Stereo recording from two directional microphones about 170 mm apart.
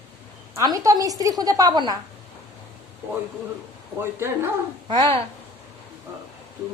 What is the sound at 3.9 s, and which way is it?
Speech, 15° right (ahead or behind).